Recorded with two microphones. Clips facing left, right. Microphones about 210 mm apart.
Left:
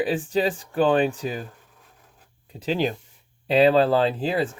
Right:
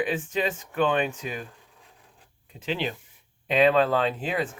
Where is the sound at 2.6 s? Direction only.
40° left (ahead or behind).